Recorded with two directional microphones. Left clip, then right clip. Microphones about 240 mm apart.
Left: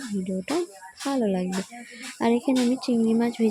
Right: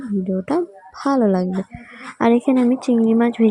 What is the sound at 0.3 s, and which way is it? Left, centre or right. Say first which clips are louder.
Speech: right 7 dB; centre.